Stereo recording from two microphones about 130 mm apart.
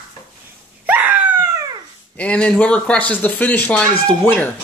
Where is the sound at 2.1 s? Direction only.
10° left (ahead or behind).